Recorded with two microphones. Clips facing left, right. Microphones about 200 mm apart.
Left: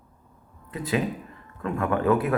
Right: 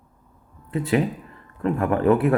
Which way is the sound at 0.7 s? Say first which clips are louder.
Right 5 dB; 30° right (ahead or behind).